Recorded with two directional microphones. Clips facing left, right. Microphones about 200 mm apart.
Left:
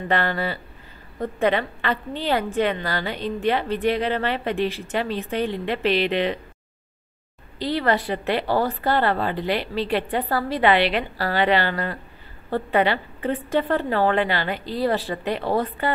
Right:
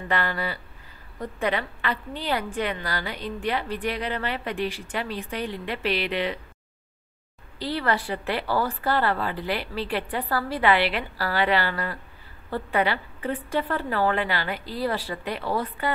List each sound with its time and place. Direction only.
0.1 s a woman's voice: 25° left (ahead or behind)
7.5 s a woman's voice: 20° left (ahead or behind)